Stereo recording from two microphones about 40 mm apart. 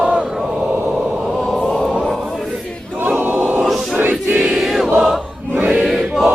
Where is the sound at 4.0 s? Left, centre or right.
Right.